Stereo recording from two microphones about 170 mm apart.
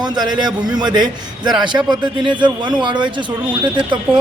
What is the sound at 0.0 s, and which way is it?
A man's voice, 25° right (ahead or behind).